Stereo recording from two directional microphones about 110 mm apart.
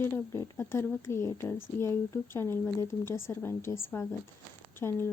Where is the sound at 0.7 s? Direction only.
25° left (ahead or behind).